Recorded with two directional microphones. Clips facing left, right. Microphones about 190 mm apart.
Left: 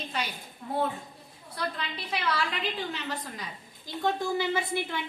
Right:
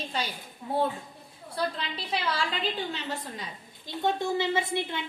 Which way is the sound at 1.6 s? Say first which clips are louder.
Right 3 dB; 30° right (ahead or behind).